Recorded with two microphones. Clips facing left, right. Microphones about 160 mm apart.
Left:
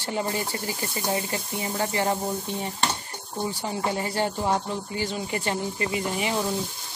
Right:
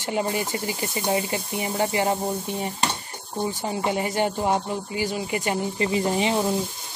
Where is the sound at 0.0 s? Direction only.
15° right (ahead or behind).